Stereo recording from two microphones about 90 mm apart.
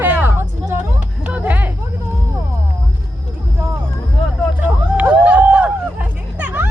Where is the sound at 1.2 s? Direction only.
15° right (ahead or behind).